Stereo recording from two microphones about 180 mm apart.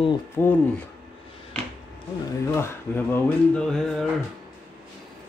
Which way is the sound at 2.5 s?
10° left (ahead or behind).